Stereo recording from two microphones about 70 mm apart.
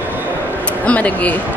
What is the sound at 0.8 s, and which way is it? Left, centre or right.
Speech, centre.